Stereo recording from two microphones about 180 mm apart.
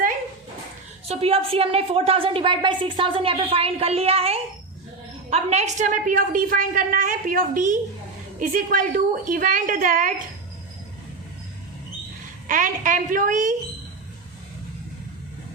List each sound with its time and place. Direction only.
1.0 s a woman's voice: 35° right (ahead or behind); by 10.1 s 50° right (ahead or behind)
12.5 s a woman's voice: 45° right (ahead or behind)